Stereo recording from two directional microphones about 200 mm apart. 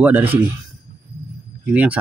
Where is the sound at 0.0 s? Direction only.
10° right (ahead or behind).